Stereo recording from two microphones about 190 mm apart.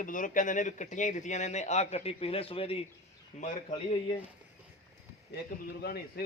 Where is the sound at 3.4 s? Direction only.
40° left (ahead or behind).